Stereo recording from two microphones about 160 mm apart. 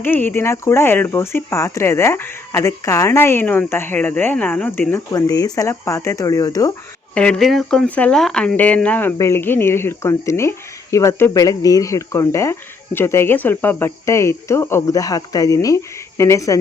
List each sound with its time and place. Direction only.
0.0 s speech: 10° left (ahead or behind)
7.1 s speech: 5° left (ahead or behind)